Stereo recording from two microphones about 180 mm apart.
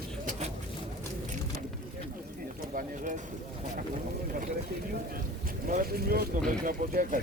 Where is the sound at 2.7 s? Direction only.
45° right (ahead or behind).